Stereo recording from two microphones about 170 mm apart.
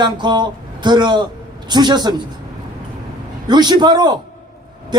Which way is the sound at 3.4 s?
25° right (ahead or behind).